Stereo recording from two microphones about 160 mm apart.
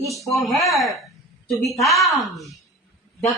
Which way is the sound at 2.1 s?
Centre (ahead or behind).